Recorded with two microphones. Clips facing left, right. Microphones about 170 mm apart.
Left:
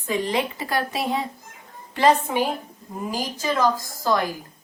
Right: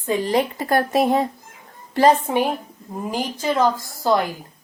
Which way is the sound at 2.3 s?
30° right (ahead or behind).